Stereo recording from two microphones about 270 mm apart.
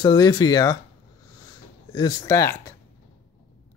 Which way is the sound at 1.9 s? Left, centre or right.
Centre.